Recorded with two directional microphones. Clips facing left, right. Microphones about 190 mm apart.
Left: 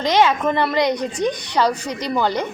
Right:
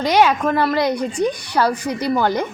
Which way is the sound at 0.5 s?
5° right (ahead or behind).